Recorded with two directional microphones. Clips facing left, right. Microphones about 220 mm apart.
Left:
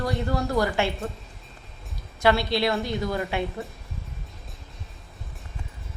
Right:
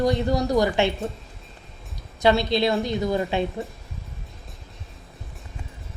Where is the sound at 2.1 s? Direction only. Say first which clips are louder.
Right 2 dB; 20° right (ahead or behind).